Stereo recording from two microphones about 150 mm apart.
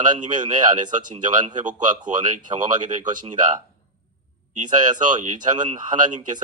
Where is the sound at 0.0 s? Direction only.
60° right (ahead or behind).